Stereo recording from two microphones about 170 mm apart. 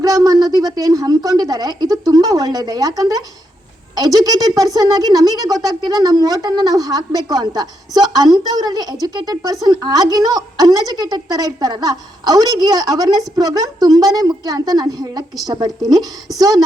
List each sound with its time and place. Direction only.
0.0 s speech: 20° right (ahead or behind)